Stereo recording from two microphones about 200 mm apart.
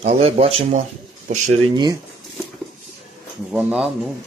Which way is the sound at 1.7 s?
20° right (ahead or behind).